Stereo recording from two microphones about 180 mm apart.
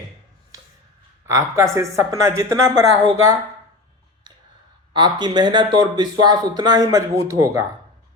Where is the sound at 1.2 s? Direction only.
15° right (ahead or behind).